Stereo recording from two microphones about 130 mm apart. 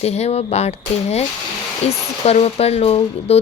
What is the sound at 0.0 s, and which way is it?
Speech, 55° left (ahead or behind).